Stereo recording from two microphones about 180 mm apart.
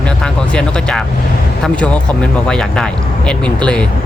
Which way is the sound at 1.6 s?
5° left (ahead or behind).